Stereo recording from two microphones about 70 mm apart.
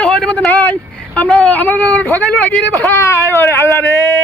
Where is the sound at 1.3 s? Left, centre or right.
Left.